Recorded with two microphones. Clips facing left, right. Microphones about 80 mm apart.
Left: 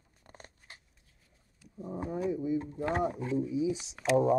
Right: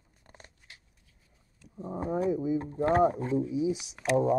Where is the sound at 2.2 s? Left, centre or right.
Centre.